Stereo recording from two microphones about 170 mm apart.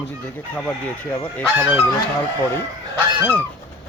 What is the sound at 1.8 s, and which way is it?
Speech, 20° left (ahead or behind).